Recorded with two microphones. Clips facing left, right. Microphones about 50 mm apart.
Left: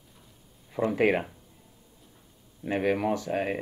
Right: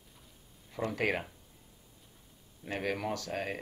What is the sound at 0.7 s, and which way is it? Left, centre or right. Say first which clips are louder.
Speech: left 8 dB; centre.